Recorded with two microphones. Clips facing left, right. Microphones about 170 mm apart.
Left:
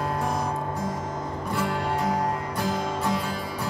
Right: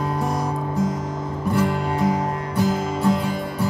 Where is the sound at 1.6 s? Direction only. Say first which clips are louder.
Right 5 dB; centre (ahead or behind).